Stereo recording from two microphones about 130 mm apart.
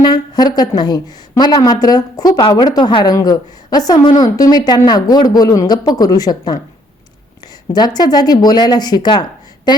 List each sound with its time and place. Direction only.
0.0 s a woman's voice: 30° left (ahead or behind)